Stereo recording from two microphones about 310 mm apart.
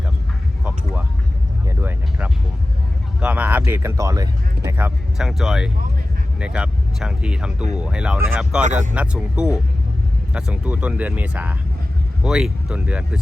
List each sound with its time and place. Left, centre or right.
1.6 s a sound: centre
3.2 s speech: centre
8.6 s speech: right
8.9 s speech: centre